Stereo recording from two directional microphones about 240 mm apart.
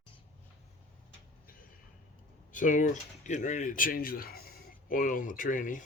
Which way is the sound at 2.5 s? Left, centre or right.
Left.